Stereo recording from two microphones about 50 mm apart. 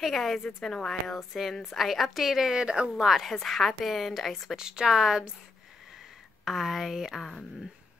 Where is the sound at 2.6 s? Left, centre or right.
Centre.